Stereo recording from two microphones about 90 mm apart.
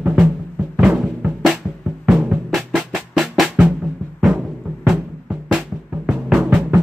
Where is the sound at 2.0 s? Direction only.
5° right (ahead or behind).